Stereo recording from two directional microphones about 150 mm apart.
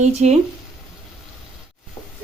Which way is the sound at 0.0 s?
45° right (ahead or behind).